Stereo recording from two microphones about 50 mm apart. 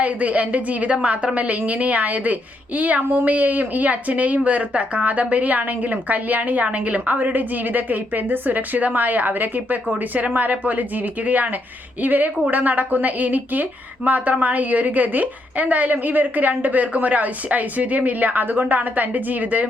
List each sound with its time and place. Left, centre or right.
0.0 s a woman's voice: right